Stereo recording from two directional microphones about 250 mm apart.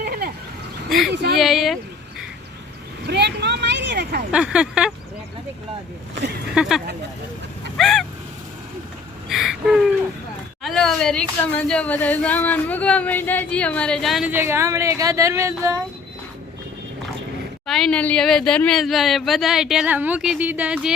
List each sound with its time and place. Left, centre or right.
0.0 s a sound: right
0.9 s speech: centre
1.1 s speech: right
1.4 s speech: centre
3.1 s a sound: right
4.3 s speech: centre
6.5 s speech: centre
9.3 s a woman's voice: centre
17.7 s speech: centre